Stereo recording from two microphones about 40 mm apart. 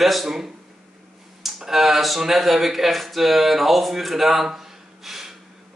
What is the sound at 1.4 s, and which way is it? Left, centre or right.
A man's voice, centre.